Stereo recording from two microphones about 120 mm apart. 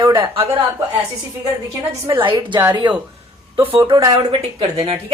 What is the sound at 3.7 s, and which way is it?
Speech, 45° right (ahead or behind).